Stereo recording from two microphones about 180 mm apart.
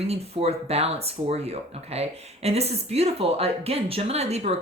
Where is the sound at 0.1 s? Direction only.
35° right (ahead or behind).